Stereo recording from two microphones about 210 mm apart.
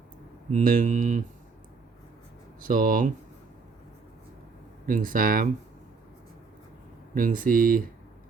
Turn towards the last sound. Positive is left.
turn(degrees=-40)  # may be behind; listen again after turning